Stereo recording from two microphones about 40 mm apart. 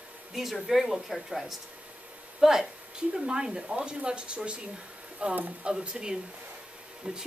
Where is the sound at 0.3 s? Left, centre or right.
Centre.